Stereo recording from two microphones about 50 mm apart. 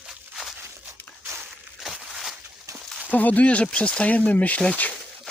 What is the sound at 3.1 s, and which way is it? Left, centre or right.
Speech, left.